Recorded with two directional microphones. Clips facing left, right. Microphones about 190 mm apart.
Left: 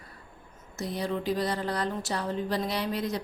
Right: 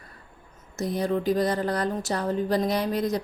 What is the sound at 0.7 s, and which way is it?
A woman's voice, 45° right (ahead or behind).